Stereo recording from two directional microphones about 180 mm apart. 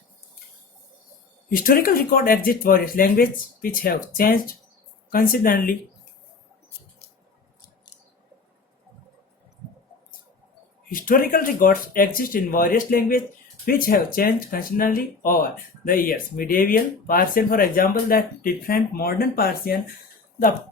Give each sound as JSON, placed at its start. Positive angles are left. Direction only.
{"t": 1.5, "sound": "speech", "side_deg": 55}
{"t": 10.8, "sound": "speech", "side_deg": 50}